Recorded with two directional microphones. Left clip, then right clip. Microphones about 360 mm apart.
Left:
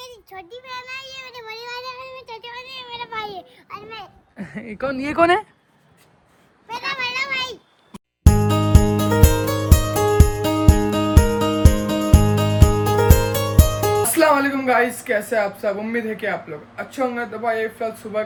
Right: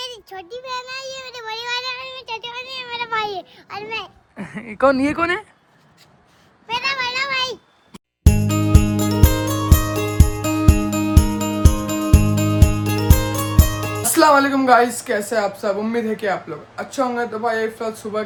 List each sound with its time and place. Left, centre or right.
0.0 s a sound: right
0.3 s child singing: centre
3.8 s a child's voice: right
4.4 s speech: centre
5.1 s speech: centre
6.9 s a sound: centre
7.9 s music: centre
13.6 s speech: centre
17.4 s speech: centre